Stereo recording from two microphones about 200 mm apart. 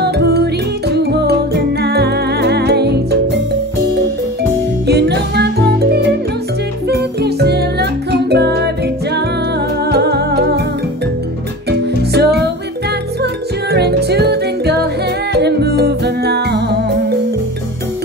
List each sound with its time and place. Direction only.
0.0 s music: 55° right (ahead or behind)
4.8 s music: 55° right (ahead or behind)
12.1 s music: 55° right (ahead or behind)